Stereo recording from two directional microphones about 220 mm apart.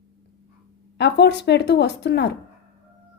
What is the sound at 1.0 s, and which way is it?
A woman's voice, 50° left (ahead or behind).